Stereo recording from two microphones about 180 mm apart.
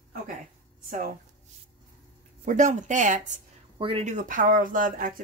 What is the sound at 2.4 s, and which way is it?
Speech, 45° right (ahead or behind).